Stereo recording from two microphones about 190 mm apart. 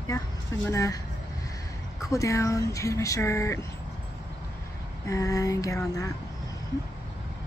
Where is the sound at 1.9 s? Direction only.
15° left (ahead or behind).